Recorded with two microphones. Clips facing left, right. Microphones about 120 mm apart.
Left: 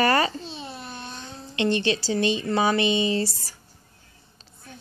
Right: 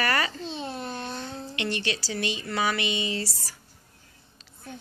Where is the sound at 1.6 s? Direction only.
25° left (ahead or behind).